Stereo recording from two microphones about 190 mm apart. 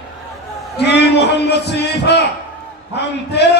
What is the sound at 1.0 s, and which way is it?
A man's voice, 60° left (ahead or behind).